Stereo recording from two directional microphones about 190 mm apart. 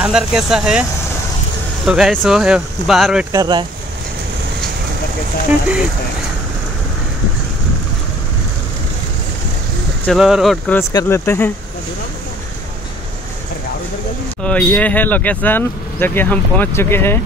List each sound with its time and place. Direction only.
0.0 s speech: 5° right (ahead or behind)
1.9 s speech: centre (ahead or behind)
3.3 s speech: 20° right (ahead or behind)
10.0 s speech: centre (ahead or behind)
10.8 s speech: 15° left (ahead or behind)
14.4 s speech: 5° left (ahead or behind)